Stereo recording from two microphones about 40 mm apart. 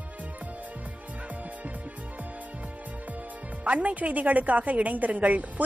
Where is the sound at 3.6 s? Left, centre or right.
Right.